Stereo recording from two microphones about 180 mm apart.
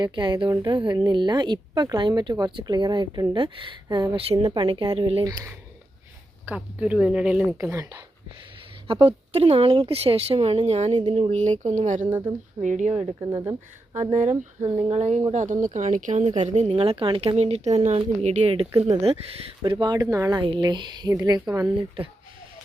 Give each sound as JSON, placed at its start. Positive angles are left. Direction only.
{"t": 0.0, "sound": "a woman's voice", "side_deg": -25}
{"t": 5.2, "sound": "a woman's voice", "side_deg": -20}
{"t": 6.4, "sound": "speech", "side_deg": -10}
{"t": 8.9, "sound": "speech", "side_deg": -30}
{"t": 13.3, "sound": "speech", "side_deg": -15}
{"t": 14.1, "sound": "speech", "side_deg": -40}
{"t": 19.6, "sound": "a woman's voice", "side_deg": -25}